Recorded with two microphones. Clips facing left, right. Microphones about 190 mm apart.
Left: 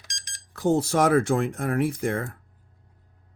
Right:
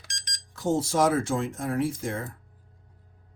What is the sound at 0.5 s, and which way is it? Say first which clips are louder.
Speech: left 3 dB; 60° left (ahead or behind).